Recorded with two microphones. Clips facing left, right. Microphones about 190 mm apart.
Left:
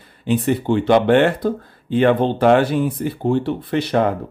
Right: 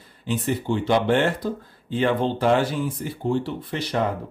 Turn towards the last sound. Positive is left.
turn(degrees=60)  # may be behind; listen again after turning